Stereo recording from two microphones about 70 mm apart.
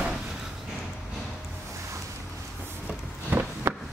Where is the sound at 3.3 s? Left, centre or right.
Right.